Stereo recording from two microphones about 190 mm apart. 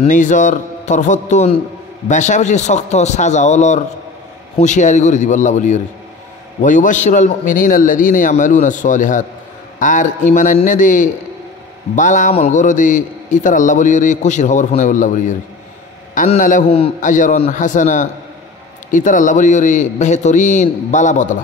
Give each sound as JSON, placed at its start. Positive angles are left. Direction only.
{"t": 0.0, "sound": "a man's voice", "side_deg": 40}